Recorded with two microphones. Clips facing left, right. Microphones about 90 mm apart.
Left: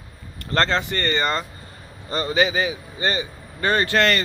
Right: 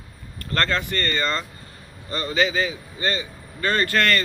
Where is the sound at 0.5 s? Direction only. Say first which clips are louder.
Left 3 dB; 20° left (ahead or behind).